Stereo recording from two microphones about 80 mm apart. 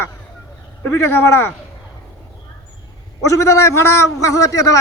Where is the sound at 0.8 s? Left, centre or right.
Left.